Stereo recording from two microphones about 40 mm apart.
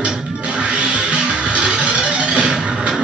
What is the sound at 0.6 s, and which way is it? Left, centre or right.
Music, right.